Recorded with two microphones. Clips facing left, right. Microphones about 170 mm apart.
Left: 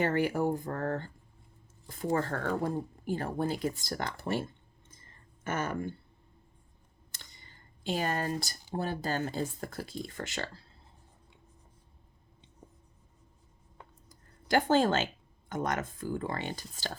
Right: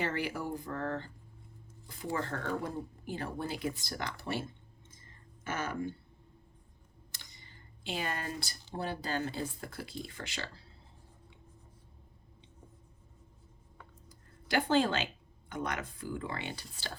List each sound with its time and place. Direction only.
0.0 s speech: 45° left (ahead or behind)
7.9 s speech: 40° left (ahead or behind)
14.1 s a sound: 45° left (ahead or behind)
15.4 s speech: 45° left (ahead or behind)